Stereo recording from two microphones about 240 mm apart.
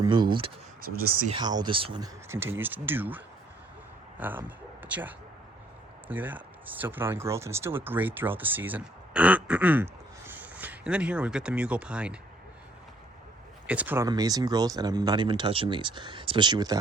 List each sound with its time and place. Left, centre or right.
0.0 s speech: centre
13.7 s speech: centre